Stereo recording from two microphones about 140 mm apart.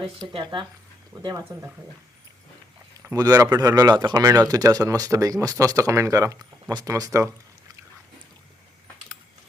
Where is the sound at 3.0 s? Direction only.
20° right (ahead or behind).